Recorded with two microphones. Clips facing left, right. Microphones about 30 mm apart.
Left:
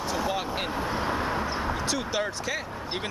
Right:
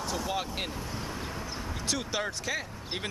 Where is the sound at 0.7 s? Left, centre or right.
Left.